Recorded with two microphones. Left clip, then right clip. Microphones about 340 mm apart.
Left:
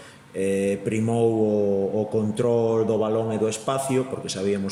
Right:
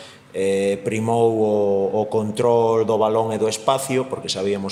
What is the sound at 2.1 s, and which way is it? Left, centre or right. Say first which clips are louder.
Speech: right 5 dB; centre.